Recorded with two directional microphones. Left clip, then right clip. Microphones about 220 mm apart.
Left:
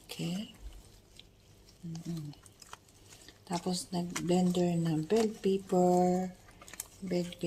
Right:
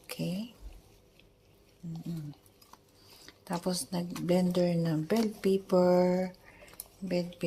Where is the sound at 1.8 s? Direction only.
15° right (ahead or behind).